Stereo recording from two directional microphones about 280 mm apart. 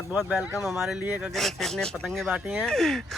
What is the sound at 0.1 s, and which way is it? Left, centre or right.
Speech, centre.